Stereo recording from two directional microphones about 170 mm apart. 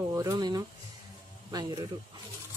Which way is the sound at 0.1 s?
20° right (ahead or behind).